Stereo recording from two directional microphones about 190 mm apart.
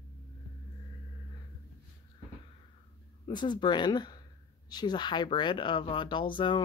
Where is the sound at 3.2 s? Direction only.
25° left (ahead or behind).